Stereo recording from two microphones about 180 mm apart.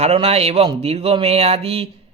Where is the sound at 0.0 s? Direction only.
35° right (ahead or behind).